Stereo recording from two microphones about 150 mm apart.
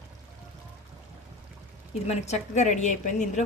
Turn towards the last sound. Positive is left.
turn(degrees=55)  # may be behind; listen again after turning